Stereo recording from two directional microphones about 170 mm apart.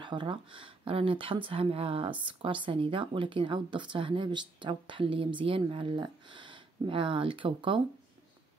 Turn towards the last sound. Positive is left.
turn(degrees=-30)  # may be behind; listen again after turning